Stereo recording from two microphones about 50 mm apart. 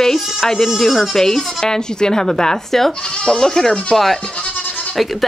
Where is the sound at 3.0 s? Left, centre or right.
Left.